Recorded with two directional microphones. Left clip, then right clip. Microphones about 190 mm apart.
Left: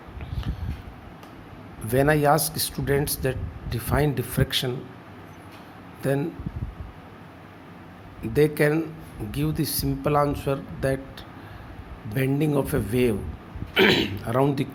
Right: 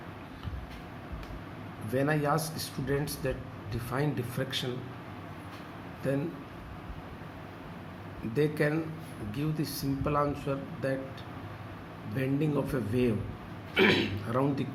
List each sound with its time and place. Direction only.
1.9 s speech: 55° left (ahead or behind)
8.3 s speech: 55° left (ahead or behind)
12.1 s speech: 55° left (ahead or behind)